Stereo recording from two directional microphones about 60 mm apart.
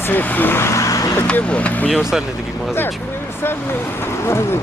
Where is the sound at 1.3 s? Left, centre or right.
Centre.